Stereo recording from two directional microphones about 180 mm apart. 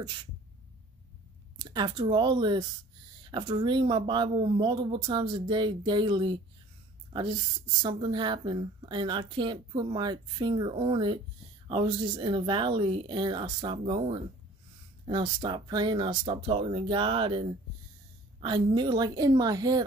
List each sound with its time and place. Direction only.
0.0 s a woman's voice: 25° right (ahead or behind)
1.6 s a woman's voice: 25° right (ahead or behind)